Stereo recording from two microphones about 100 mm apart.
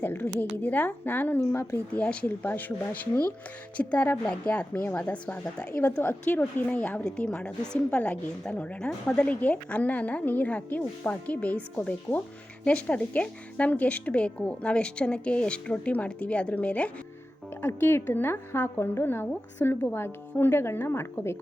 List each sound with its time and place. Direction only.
0.0 s a woman's voice: 20° left (ahead or behind)
1.9 s a woman's voice: 15° left (ahead or behind)